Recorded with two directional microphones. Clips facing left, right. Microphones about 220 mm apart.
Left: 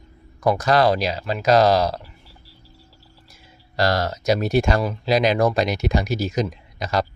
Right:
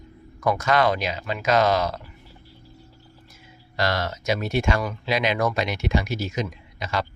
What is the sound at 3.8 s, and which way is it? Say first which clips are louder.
Speech: left 4 dB; 40° left (ahead or behind).